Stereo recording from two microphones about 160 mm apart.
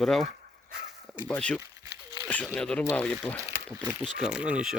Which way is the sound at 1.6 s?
20° right (ahead or behind).